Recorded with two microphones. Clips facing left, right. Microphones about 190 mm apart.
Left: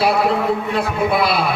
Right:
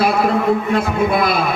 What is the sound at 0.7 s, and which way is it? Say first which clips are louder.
Speech: right 2 dB; 45° right (ahead or behind).